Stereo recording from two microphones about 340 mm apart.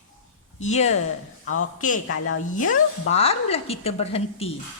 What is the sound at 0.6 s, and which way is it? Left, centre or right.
Speech, centre.